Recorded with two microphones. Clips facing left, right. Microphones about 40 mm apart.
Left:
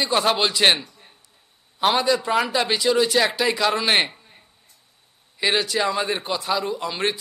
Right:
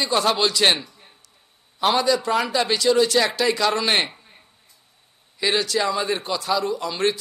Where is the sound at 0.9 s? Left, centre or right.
Centre.